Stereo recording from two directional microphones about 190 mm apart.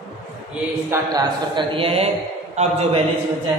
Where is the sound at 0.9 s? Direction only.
20° right (ahead or behind).